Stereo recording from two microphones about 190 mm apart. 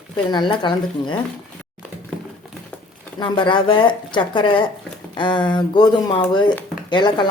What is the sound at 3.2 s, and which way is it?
Speech, 25° left (ahead or behind).